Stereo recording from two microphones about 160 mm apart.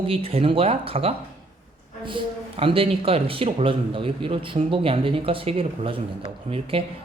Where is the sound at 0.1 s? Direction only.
35° right (ahead or behind).